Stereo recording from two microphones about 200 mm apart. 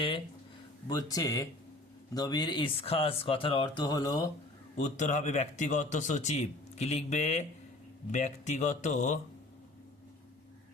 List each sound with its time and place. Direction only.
0.9 s speech: 20° left (ahead or behind)
4.8 s a man's voice: 35° left (ahead or behind)